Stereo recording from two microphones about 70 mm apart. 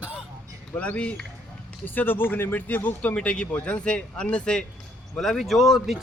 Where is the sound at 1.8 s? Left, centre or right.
Left; by 4.6 s centre.